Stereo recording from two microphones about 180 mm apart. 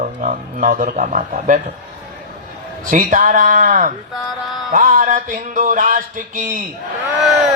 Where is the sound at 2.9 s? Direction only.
45° right (ahead or behind).